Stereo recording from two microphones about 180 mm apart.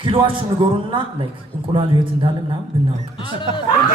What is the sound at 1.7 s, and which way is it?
Speech, 25° right (ahead or behind).